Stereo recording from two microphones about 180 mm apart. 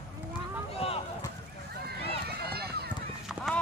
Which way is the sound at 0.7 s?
35° left (ahead or behind).